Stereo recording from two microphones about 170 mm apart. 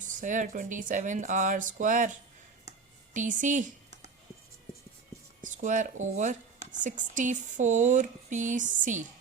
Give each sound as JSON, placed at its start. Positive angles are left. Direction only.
{"t": 0.0, "sound": "speech", "side_deg": -50}
{"t": 5.4, "sound": "speech", "side_deg": -50}